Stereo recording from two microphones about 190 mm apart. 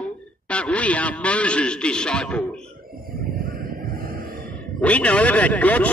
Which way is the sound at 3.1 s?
50° right (ahead or behind).